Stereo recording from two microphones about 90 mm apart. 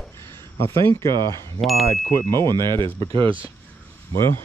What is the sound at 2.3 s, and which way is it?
Speech, 50° right (ahead or behind).